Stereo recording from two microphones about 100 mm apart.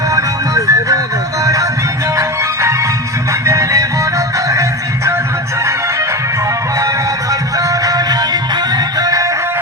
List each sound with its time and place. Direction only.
0.1 s music: 35° right (ahead or behind)
2.1 s music: 30° right (ahead or behind)
7.6 s music: 35° right (ahead or behind)